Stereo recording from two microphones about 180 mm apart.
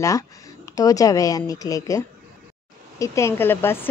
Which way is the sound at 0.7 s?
20° left (ahead or behind).